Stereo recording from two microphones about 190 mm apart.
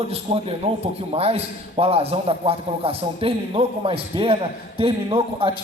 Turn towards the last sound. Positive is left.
turn(degrees=-30)  # may be behind; listen again after turning